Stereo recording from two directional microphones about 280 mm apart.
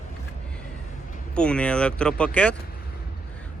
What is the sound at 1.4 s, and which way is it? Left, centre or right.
Speech, centre.